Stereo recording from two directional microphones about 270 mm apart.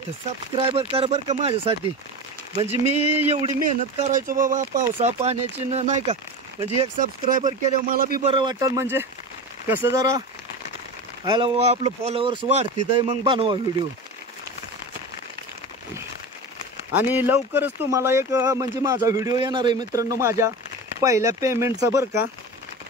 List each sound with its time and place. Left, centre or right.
0.6 s speech: right
2.5 s speech: centre
3.3 s speech: right
8.3 s speech: centre
11.2 s speech: centre
16.9 s speech: centre